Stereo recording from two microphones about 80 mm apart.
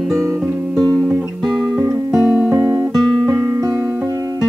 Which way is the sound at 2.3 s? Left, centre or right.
Right.